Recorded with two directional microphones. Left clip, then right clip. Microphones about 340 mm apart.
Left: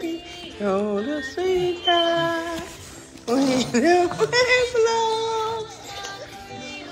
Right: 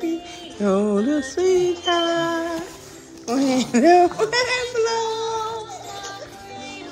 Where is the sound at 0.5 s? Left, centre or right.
Centre.